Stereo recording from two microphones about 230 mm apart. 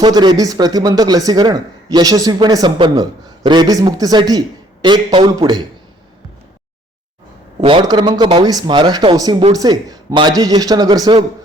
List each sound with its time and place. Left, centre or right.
0.0 s speech: centre
7.6 s speech: right